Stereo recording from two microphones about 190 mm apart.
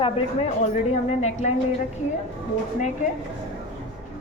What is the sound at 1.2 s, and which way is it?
Speech, 35° left (ahead or behind).